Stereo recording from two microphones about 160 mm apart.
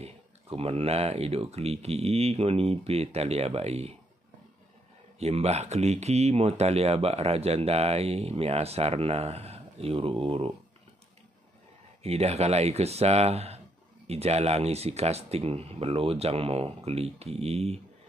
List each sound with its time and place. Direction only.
0.0 s speech: 40° right (ahead or behind)
5.2 s speech: 40° right (ahead or behind)
12.0 s speech: 40° right (ahead or behind)